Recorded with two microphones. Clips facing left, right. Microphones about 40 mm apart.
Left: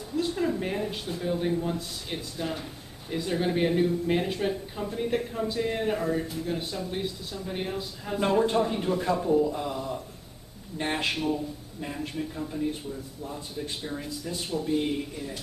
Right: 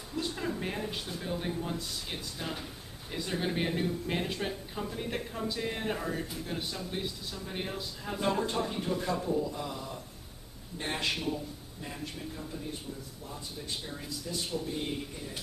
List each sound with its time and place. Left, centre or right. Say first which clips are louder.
0.1 s speech: left 7 dB; centre
8.5 s speech: left 7 dB; left